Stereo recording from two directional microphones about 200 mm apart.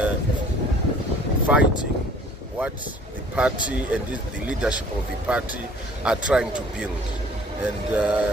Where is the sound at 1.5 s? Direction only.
5° right (ahead or behind).